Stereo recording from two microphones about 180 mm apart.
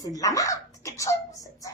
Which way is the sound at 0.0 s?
20° left (ahead or behind).